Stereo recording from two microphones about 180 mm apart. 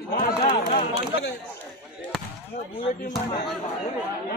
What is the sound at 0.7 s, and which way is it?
Speech, 55° left (ahead or behind).